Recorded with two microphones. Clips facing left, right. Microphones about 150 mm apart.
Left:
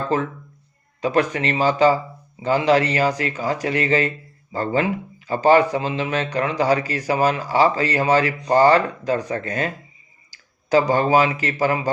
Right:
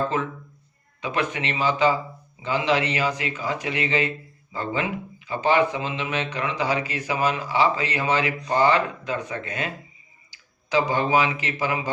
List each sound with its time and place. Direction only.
1.0 s speech: 40° left (ahead or behind)